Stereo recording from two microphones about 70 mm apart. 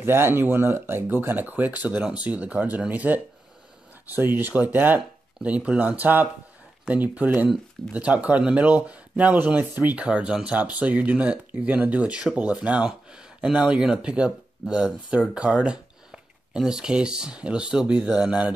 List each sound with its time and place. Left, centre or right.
0.0 s speech: right; by 18.5 s centre